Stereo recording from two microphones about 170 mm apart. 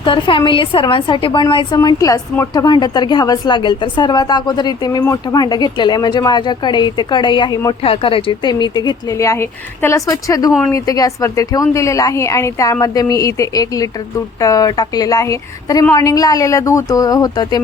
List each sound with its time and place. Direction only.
0.0 s a woman's voice: 30° left (ahead or behind)